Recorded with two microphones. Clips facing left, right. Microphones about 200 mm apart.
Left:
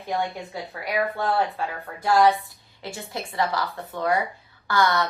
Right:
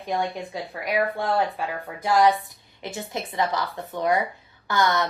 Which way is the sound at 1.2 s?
15° right (ahead or behind).